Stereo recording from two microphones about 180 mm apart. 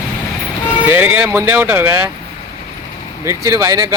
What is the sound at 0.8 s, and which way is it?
Speech, 10° right (ahead or behind).